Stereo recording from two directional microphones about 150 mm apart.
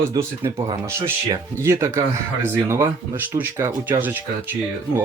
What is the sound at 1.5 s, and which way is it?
Speech, 20° right (ahead or behind).